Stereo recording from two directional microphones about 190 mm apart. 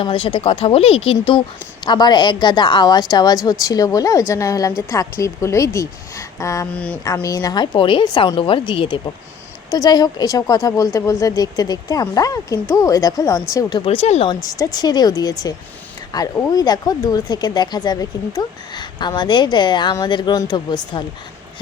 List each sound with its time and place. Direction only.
0.0 s a woman's voice: 25° left (ahead or behind)
6.7 s a woman's voice: 5° left (ahead or behind)
7.0 s speech: 20° left (ahead or behind)
14.4 s speech: 20° left (ahead or behind)